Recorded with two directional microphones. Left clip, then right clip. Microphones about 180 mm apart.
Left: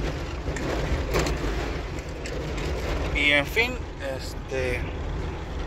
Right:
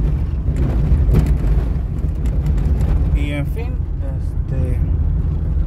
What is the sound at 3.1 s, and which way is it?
Vehicle, 20° right (ahead or behind).